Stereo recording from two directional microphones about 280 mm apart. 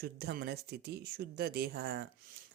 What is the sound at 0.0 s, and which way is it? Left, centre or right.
Speech, right.